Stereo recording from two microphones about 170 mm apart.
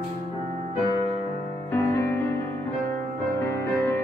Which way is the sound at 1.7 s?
15° left (ahead or behind).